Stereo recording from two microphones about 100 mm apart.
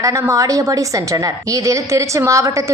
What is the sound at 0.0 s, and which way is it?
A woman's voice, 30° right (ahead or behind).